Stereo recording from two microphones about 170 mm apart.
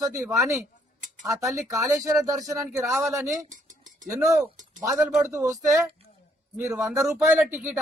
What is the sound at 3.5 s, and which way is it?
Dishes, 50° right (ahead or behind).